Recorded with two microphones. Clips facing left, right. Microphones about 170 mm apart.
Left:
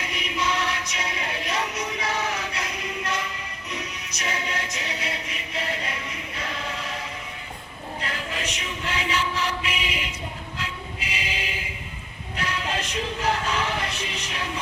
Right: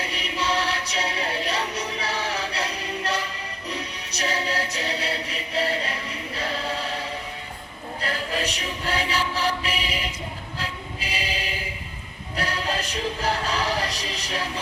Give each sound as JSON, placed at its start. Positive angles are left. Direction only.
{"t": 0.0, "sound": "music", "side_deg": -30}
{"t": 8.0, "sound": "music", "side_deg": -35}
{"t": 10.6, "sound": "choir", "side_deg": -35}
{"t": 12.4, "sound": "music", "side_deg": -35}